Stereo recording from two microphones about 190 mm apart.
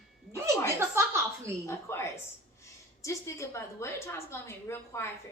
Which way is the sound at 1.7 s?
15° left (ahead or behind).